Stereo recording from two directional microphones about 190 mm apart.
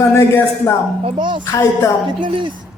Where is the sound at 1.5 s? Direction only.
15° left (ahead or behind).